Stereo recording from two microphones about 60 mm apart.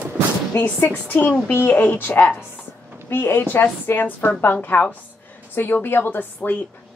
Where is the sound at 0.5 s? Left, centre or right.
Left.